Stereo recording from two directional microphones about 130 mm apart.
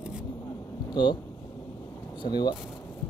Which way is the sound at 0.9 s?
35° left (ahead or behind).